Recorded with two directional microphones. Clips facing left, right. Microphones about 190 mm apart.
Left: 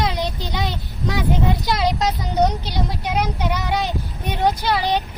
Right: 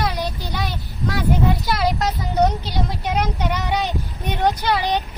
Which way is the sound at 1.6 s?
20° left (ahead or behind).